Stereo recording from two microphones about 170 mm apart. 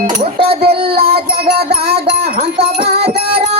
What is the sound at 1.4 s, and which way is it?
Music, 70° right (ahead or behind).